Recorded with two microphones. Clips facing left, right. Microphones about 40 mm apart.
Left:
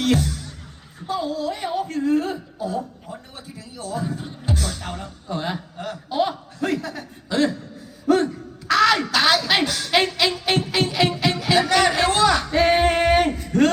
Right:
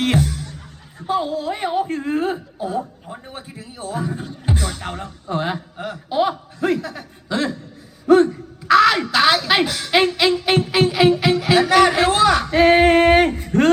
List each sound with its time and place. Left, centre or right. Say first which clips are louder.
0.0 s music: right 1 dB; right
1.0 s speech: right 3 dB; right
4.4 s a sound: right 3 dB; right